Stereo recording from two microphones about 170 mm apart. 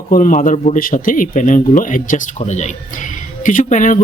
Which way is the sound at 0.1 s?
50° left (ahead or behind).